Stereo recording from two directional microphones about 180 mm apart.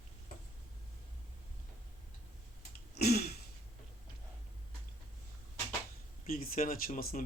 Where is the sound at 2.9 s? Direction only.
60° left (ahead or behind).